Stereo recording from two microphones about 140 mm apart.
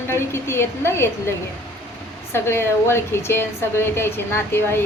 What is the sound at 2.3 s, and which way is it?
A woman's voice, 15° left (ahead or behind).